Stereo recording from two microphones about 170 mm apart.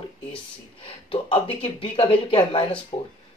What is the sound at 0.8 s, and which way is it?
Speech, 30° left (ahead or behind).